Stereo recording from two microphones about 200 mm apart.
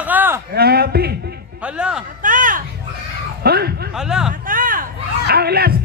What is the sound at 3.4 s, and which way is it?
Bow-wow, 50° right (ahead or behind).